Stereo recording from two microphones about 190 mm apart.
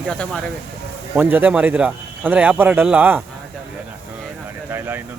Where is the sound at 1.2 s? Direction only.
10° right (ahead or behind).